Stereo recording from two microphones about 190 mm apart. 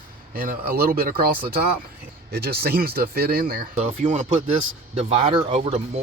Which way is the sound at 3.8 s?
40° right (ahead or behind).